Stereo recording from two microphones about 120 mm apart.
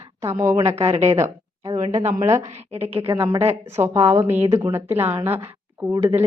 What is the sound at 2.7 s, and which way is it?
Speech, 55° right (ahead or behind).